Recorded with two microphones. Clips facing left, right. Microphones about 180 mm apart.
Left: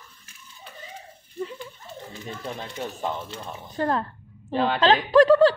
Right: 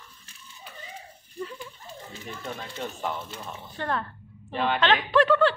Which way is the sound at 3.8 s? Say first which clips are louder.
Left 5 dB; 35° left (ahead or behind).